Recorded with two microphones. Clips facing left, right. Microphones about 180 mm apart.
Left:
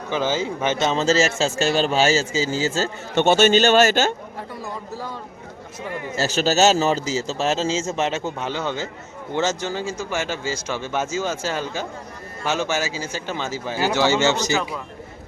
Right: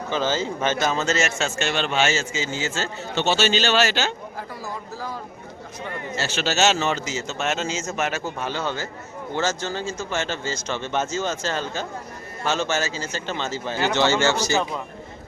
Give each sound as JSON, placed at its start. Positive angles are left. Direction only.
{"t": 0.1, "sound": "a man's voice", "side_deg": 15}
{"t": 3.2, "sound": "a man's voice", "side_deg": 50}
{"t": 6.1, "sound": "a man's voice", "side_deg": 40}